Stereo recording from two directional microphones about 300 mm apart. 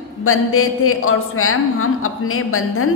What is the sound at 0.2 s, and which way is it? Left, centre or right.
A woman's voice, left.